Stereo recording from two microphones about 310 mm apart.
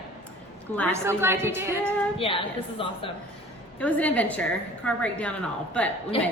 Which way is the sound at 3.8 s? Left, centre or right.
Centre.